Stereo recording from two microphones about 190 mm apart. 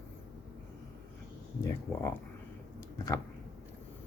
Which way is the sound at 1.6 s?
15° left (ahead or behind).